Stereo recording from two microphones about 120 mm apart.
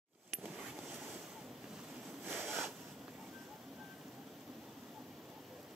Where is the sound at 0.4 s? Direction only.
5° right (ahead or behind).